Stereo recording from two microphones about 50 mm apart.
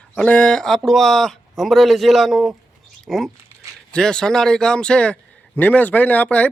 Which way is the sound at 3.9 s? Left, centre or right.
Centre.